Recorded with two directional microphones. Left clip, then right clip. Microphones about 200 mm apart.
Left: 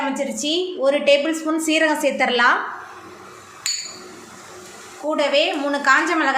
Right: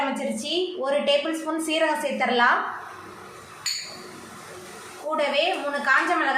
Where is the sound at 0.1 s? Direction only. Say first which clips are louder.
Left 5 dB; 35° left (ahead or behind).